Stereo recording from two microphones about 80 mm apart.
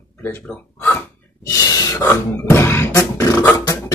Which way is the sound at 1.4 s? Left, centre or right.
Left.